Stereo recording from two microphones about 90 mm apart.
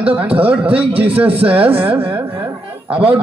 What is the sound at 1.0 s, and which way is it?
Speech, 20° right (ahead or behind).